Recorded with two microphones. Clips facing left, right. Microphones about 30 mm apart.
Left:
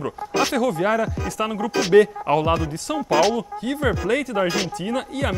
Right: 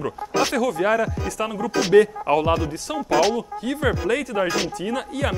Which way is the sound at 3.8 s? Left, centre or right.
Centre.